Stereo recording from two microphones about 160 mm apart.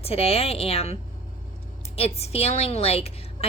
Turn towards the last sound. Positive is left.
turn(degrees=40)  # may be behind; listen again after turning